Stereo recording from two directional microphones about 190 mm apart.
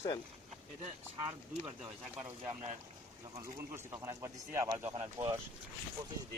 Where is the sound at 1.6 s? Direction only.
5° right (ahead or behind).